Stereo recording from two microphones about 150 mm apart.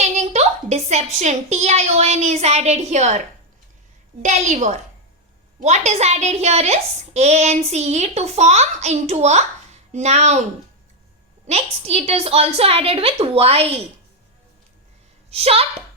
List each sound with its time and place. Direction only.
0.0 s a woman's voice: 50° right (ahead or behind)
11.4 s a woman's voice: 45° right (ahead or behind)
15.3 s a woman's voice: 40° right (ahead or behind)